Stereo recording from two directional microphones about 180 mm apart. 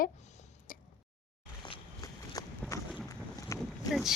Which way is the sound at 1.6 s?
25° left (ahead or behind).